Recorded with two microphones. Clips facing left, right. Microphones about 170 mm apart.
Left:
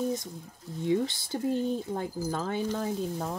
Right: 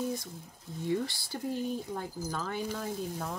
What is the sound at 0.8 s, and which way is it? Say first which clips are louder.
Speech: left 5 dB; 20° left (ahead or behind).